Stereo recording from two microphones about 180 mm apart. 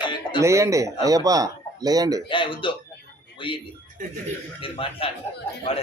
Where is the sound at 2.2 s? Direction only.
25° left (ahead or behind).